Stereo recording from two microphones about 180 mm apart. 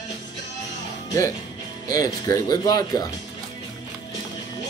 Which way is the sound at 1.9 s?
20° left (ahead or behind).